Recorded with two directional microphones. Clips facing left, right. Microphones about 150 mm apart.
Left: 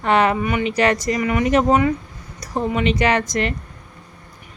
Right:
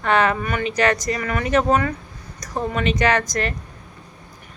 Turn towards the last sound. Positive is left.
turn(degrees=25)  # may be behind; listen again after turning